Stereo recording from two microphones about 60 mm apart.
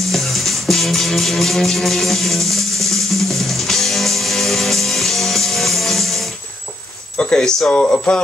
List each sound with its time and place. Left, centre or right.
0.1 s music: centre
7.2 s speech: centre